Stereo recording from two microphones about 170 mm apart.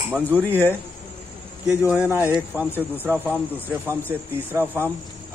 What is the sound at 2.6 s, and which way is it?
Speech, 10° left (ahead or behind).